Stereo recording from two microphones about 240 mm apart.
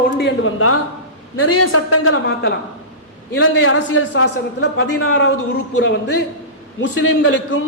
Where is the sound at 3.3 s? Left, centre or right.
Left.